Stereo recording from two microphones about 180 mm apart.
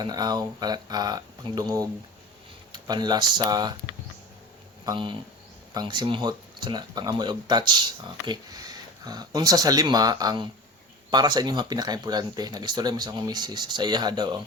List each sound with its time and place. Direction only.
0.0 s speech: 20° right (ahead or behind)
4.9 s speech: 25° right (ahead or behind)